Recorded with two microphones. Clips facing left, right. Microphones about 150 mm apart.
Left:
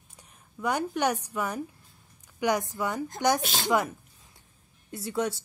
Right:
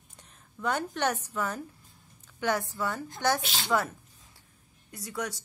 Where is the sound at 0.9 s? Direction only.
10° left (ahead or behind).